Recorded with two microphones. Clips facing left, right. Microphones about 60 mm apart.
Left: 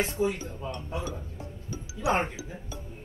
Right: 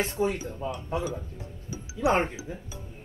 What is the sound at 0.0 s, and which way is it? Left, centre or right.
Speech, right.